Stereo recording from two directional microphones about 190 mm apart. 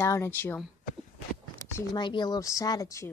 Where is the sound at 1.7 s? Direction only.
25° left (ahead or behind).